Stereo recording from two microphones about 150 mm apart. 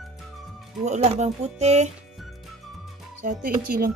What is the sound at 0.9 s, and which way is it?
Speech, 50° right (ahead or behind).